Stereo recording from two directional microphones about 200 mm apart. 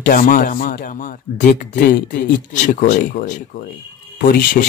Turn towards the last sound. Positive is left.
turn(degrees=45)  # may be behind; listen again after turning